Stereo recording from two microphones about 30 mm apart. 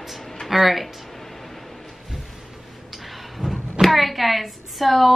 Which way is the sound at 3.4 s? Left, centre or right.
Centre.